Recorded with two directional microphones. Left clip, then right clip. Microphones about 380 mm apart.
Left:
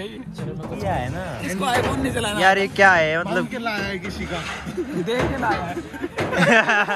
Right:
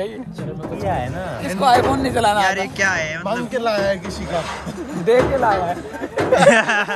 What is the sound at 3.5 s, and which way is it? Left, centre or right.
Speech, centre.